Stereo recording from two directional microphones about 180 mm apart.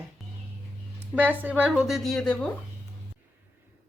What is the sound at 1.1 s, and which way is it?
A woman's voice, 10° right (ahead or behind).